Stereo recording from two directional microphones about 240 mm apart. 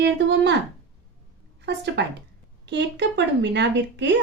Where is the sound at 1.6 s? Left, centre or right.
Right.